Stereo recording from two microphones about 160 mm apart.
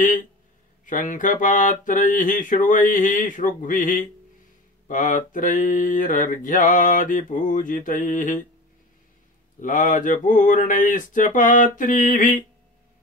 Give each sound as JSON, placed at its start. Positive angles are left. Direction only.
{"t": 0.8, "sound": "mantra", "side_deg": 55}
{"t": 9.6, "sound": "mantra", "side_deg": 55}